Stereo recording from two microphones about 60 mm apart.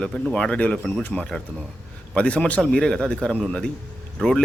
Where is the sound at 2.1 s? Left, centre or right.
Left.